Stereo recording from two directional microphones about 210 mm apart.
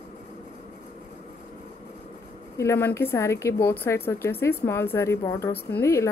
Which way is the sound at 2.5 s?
10° left (ahead or behind).